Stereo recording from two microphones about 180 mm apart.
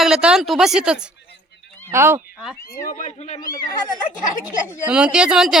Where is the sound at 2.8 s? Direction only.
40° left (ahead or behind).